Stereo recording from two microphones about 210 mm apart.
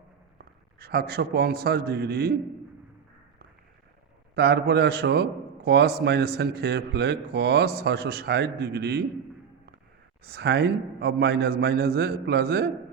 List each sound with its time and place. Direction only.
0.3 s a man's voice: 50° right (ahead or behind)
4.4 s a man's voice: 50° right (ahead or behind)
10.2 s a man's voice: 55° right (ahead or behind)